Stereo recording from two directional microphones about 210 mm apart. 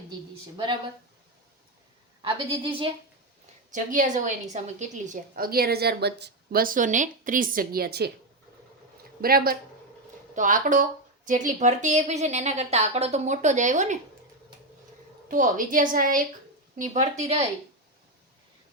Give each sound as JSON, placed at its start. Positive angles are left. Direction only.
{"t": 0.5, "sound": "a woman's voice", "side_deg": -20}
{"t": 2.2, "sound": "a woman's voice", "side_deg": -25}
{"t": 3.7, "sound": "a woman's voice", "side_deg": -35}
{"t": 9.2, "sound": "a woman's voice", "side_deg": -45}
{"t": 15.3, "sound": "a woman's voice", "side_deg": -40}